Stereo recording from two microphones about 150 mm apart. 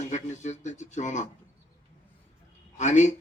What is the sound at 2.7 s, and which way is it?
Speech, 50° left (ahead or behind).